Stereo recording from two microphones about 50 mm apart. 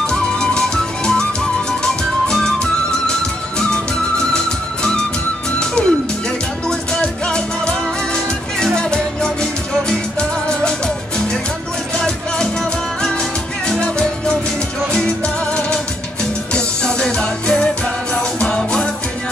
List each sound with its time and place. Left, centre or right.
0.0 s music: centre
5.8 s music: left
13.7 s music: centre